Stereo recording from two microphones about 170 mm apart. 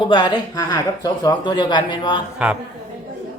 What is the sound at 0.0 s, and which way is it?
Speech, 30° left (ahead or behind).